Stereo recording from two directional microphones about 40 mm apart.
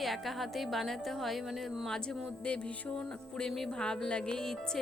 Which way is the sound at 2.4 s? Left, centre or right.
Left.